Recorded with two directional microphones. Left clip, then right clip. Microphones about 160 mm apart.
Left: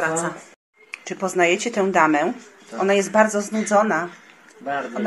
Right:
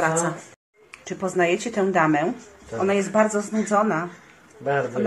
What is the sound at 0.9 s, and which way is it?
Speech, 20° left (ahead or behind).